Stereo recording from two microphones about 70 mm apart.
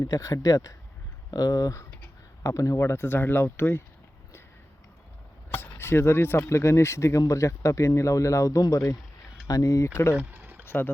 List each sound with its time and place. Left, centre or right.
0.2 s speech: left
2.4 s speech: left
2.9 s speech: left
5.5 s speech: left
10.2 s a sound: right
10.7 s speech: left